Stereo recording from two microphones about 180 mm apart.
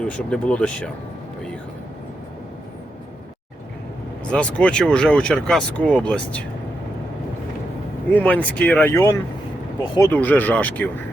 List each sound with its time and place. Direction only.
0.0 s speech: 5° left (ahead or behind)
4.3 s speech: 5° left (ahead or behind)
8.1 s speech: 10° left (ahead or behind); by 10.1 s 25° left (ahead or behind)
10.1 s speech: 10° left (ahead or behind)